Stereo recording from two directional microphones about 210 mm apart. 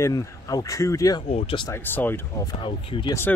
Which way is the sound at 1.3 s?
30° left (ahead or behind).